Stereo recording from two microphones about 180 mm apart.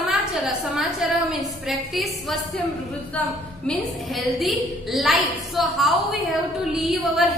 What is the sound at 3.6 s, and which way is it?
A woman's voice, centre (ahead or behind).